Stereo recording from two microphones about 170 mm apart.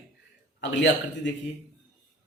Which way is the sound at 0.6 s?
90° left.